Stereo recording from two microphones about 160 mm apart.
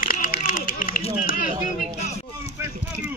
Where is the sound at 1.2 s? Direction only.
60° left (ahead or behind).